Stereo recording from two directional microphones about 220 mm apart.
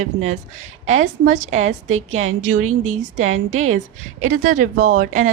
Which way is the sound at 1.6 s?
70° right (ahead or behind).